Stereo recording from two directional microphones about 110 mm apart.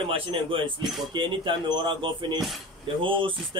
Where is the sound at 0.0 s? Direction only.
55° right (ahead or behind).